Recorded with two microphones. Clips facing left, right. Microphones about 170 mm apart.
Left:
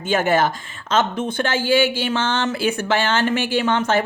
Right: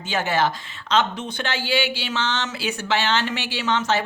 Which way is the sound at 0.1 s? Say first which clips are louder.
Left 4 dB; 50° left (ahead or behind).